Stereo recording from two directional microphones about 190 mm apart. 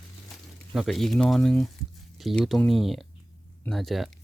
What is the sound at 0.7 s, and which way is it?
Speech, centre (ahead or behind).